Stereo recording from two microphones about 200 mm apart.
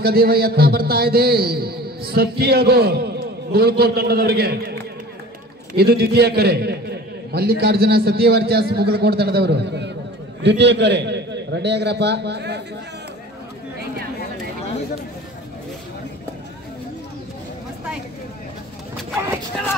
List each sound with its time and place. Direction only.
0.0 s a man's voice: 50° right (ahead or behind)
5.8 s a man's voice: 55° right (ahead or behind)